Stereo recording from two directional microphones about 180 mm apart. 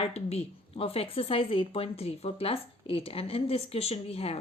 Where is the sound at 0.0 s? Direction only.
35° left (ahead or behind).